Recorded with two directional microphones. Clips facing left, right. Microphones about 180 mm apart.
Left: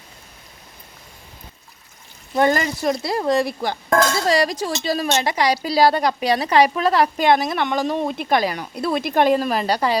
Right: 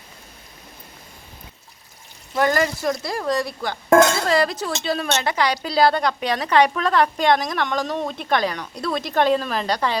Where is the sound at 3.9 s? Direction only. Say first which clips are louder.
Right 5 dB; 25° right (ahead or behind).